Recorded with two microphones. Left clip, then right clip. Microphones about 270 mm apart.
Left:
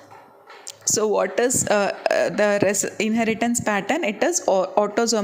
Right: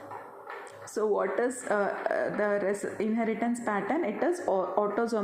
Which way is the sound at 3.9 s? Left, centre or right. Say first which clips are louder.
Left 7 dB; left.